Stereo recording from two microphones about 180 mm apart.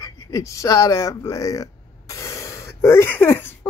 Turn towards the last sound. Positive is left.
turn(degrees=10)  # may be behind; listen again after turning